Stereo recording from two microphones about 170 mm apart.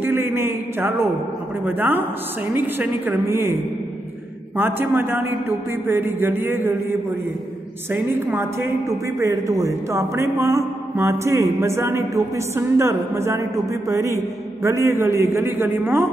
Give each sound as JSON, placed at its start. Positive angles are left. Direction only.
{"t": 0.0, "sound": "a woman's voice", "side_deg": -15}
{"t": 4.6, "sound": "a woman's voice", "side_deg": -10}